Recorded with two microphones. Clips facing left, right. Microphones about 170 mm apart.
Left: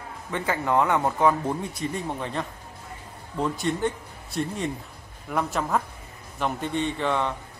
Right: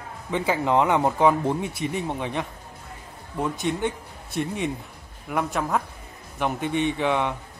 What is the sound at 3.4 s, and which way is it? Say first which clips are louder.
A man's voice: even; centre (ahead or behind).